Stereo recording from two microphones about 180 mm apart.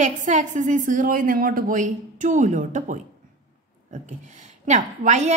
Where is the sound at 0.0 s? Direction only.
45° right (ahead or behind).